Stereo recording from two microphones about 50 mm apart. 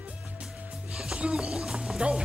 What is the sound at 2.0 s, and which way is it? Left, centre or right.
Speech, right.